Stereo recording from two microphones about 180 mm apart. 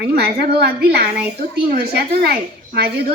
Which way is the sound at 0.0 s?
65° right (ahead or behind).